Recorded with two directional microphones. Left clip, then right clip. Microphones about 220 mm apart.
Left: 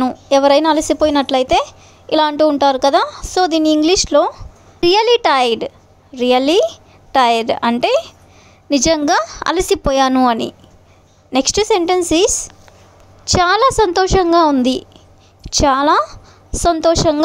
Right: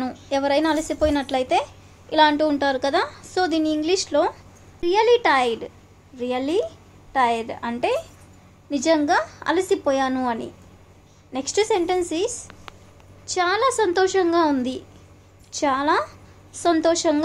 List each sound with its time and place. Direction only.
0.0 s a woman's voice: 40° left (ahead or behind)